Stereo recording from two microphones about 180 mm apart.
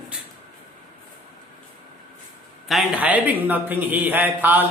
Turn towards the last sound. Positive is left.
turn(degrees=-10)  # may be behind; listen again after turning